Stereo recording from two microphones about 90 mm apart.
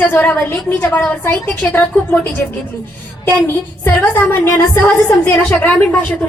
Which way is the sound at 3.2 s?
25° left (ahead or behind).